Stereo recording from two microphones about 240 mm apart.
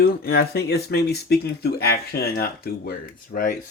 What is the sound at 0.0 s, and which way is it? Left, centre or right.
Speech, left.